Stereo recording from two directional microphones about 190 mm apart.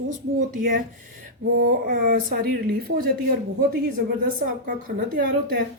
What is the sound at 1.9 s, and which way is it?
Speech, 45° right (ahead or behind).